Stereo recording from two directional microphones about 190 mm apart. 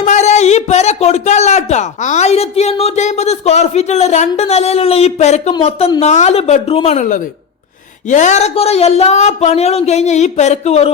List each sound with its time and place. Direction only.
0.0 s a man's voice: 35° left (ahead or behind)